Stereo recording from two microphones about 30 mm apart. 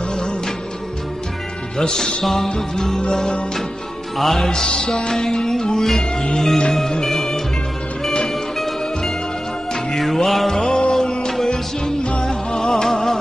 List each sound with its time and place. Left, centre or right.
0.1 s music: left
1.8 s music: centre
3.0 s music: left
4.2 s music: centre
4.6 s music: left
8.3 s music: centre
10.5 s music: left